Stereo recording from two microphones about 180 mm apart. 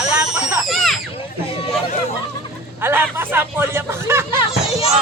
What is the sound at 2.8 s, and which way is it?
Speech, 10° right (ahead or behind).